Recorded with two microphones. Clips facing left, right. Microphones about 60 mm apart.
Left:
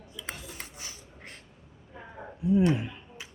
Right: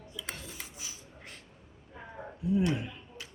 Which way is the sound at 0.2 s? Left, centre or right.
Left.